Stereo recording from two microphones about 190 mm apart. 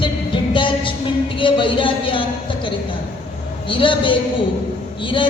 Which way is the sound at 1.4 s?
25° left (ahead or behind).